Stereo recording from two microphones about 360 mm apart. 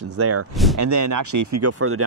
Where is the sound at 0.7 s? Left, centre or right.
Right.